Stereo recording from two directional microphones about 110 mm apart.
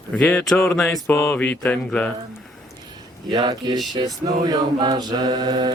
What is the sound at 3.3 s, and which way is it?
Speech, 40° right (ahead or behind).